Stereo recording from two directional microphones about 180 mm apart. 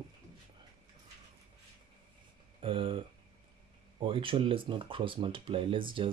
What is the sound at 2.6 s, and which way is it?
Speech, 30° right (ahead or behind).